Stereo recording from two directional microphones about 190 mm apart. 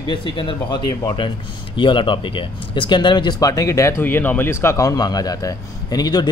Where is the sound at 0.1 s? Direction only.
25° left (ahead or behind).